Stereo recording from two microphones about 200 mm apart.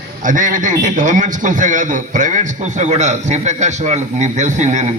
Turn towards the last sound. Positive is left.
turn(degrees=-35)  # may be behind; listen again after turning